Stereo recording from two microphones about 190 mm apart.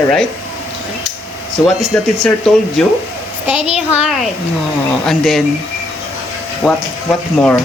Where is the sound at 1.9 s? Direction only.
5° left (ahead or behind).